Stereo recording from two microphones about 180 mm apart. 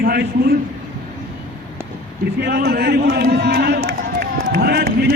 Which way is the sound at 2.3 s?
60° right (ahead or behind).